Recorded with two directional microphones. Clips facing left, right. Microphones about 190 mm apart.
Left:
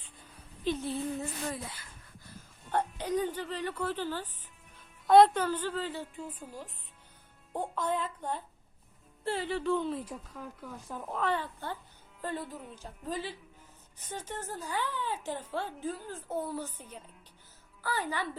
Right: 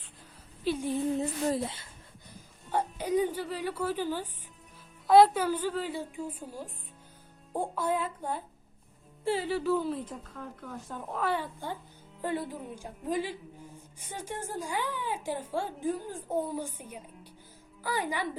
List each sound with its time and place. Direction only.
0.6 s a woman's voice: 10° right (ahead or behind)
1.5 s speech: 30° right (ahead or behind)
2.3 s a woman's voice: 10° right (ahead or behind); by 11.2 s 5° left (ahead or behind)
11.2 s a woman's voice: 10° right (ahead or behind)